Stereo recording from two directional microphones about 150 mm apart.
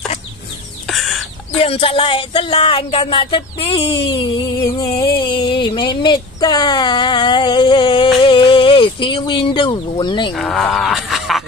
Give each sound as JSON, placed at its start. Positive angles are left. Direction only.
{"t": 0.8, "sound": "bird", "side_deg": 0}
{"t": 1.6, "sound": "speech", "side_deg": 40}
{"t": 10.3, "sound": "speech", "side_deg": 5}